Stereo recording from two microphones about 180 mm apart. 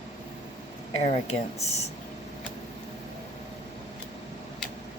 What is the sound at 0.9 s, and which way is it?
Speech, 35° left (ahead or behind).